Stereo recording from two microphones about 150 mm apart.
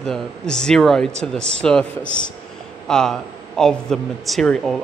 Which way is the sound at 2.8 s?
5° left (ahead or behind).